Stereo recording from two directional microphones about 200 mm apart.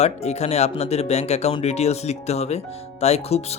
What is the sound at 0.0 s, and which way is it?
Speech, 35° left (ahead or behind).